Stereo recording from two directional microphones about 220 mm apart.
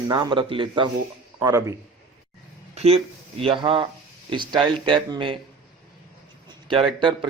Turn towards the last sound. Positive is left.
turn(degrees=-20)  # may be behind; listen again after turning